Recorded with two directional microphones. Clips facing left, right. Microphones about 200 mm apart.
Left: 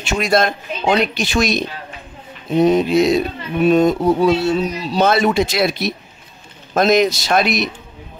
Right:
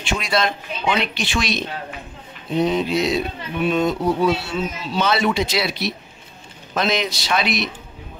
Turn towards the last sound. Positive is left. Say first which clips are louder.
# left 5 dB
turn(degrees=45)  # may be behind; listen again after turning